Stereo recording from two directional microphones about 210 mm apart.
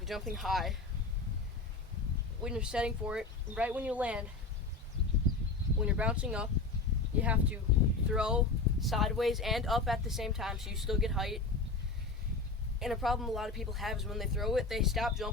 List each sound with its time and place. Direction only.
0.0 s speech: centre (ahead or behind)
2.4 s speech: 5° right (ahead or behind)
5.8 s speech: 5° right (ahead or behind)
12.8 s speech: centre (ahead or behind)